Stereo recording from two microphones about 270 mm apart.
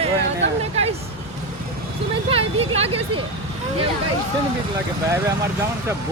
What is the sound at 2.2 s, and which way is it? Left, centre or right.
Speech, right.